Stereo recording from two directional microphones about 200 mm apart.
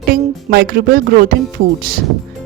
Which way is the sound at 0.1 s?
45° right (ahead or behind).